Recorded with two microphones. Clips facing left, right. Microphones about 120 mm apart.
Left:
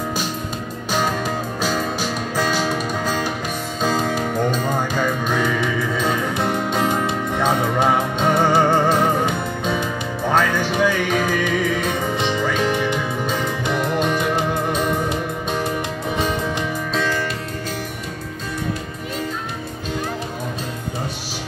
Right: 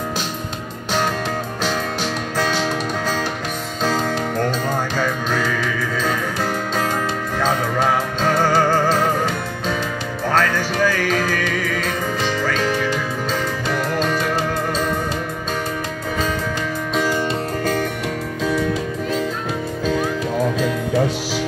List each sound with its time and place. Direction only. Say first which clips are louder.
2.3 s music: even; 10° left (ahead or behind)
16.9 s music: right 3 dB; 10° right (ahead or behind)
20.6 s music: right 9 dB; 90° right